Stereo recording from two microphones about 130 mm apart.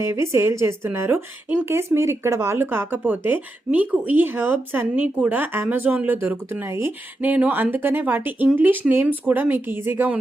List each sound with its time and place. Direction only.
0.0 s a woman's voice: 20° right (ahead or behind)